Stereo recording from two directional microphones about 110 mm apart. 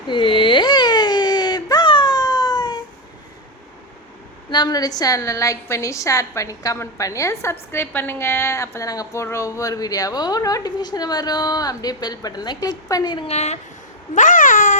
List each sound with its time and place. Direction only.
0.1 s baby cry: 50° left (ahead or behind)
4.5 s a woman's voice: 40° left (ahead or behind)
13.2 s speech: 85° left